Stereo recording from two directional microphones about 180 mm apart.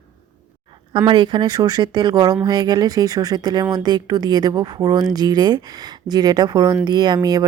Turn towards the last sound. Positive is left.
turn(degrees=-20)  # may be behind; listen again after turning